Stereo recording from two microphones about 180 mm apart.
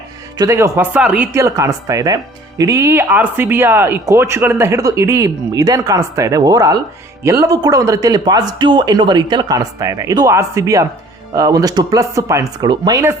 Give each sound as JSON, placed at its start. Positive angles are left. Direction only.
{"t": 0.3, "sound": "a man's voice", "side_deg": -15}